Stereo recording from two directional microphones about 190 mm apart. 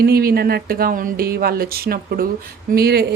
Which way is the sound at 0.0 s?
50° right (ahead or behind).